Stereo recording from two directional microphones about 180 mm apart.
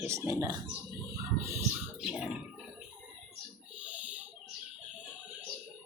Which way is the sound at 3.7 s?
5° right (ahead or behind).